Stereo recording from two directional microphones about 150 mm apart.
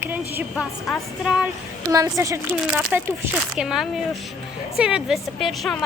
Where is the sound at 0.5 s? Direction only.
Centre (ahead or behind).